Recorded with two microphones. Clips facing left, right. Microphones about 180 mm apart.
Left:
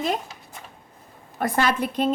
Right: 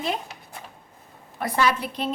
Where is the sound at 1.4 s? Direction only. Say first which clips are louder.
Left 1 dB; 50° left (ahead or behind).